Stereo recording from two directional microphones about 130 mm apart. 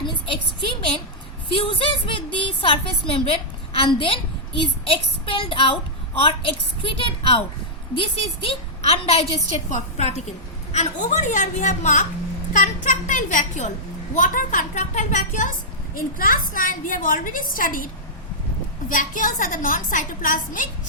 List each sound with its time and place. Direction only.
0.0 s a sound: 40° left (ahead or behind)
1.5 s a woman's voice: 45° left (ahead or behind)
9.6 s a woman's voice: 65° left (ahead or behind)
12.5 s a woman's voice: 85° left
14.2 s a woman's voice: 90° left
16.0 s a woman's voice: 90° left
18.9 s a woman's voice: 90° left